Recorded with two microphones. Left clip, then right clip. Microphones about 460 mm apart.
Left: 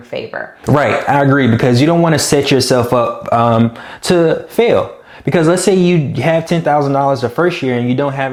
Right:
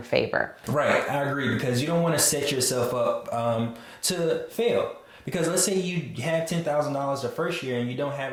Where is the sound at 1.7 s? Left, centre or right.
Left.